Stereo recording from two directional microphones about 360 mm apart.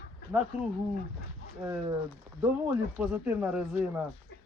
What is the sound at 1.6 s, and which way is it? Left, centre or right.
Speech, centre.